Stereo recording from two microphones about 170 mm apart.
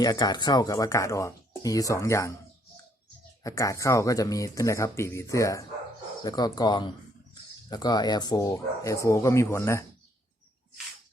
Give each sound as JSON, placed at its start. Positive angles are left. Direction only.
{"t": 0.0, "sound": "speech", "side_deg": 25}
{"t": 3.4, "sound": "speech", "side_deg": 20}